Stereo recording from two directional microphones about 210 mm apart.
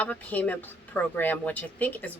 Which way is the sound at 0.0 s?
5° left (ahead or behind).